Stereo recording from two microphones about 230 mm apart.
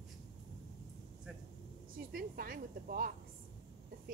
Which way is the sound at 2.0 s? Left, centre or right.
Right.